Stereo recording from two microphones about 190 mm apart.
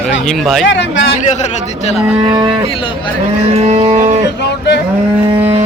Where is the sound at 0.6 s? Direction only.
70° left (ahead or behind).